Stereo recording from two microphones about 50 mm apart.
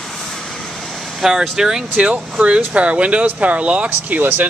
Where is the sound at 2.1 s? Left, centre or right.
Right.